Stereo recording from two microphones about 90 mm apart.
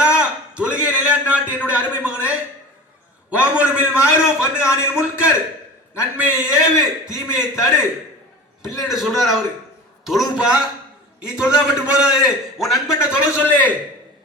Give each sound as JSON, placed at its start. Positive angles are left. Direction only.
{"t": 0.0, "sound": "a sound", "side_deg": -15}
{"t": 3.2, "sound": "a man's voice", "side_deg": -15}
{"t": 13.1, "sound": "a man's voice", "side_deg": -10}
{"t": 13.5, "sound": "a man's voice", "side_deg": 20}